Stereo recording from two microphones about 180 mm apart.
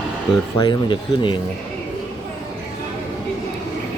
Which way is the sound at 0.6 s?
25° left (ahead or behind).